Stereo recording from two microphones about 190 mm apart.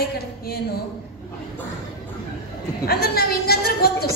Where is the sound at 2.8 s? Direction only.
55° left (ahead or behind).